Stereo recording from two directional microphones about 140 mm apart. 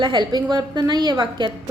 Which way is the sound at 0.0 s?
30° right (ahead or behind).